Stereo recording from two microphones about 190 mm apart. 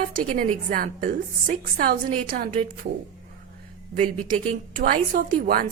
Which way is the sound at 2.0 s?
35° right (ahead or behind).